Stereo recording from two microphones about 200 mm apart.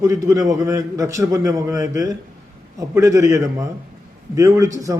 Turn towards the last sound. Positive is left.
turn(degrees=-15)  # may be behind; listen again after turning